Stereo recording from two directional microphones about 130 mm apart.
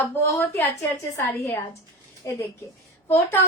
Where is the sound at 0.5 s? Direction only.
20° left (ahead or behind).